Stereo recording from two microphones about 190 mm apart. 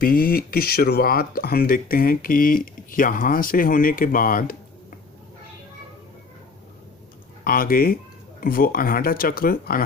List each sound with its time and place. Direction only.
0.0 s speech: 50° left (ahead or behind)
7.4 s speech: 50° left (ahead or behind)